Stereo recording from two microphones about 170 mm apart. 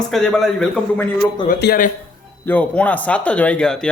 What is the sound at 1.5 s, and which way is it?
Speech, 75° left (ahead or behind).